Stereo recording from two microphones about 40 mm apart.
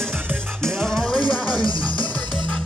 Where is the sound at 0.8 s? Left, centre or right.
Centre.